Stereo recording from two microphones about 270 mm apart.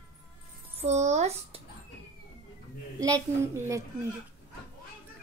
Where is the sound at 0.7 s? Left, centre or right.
Right.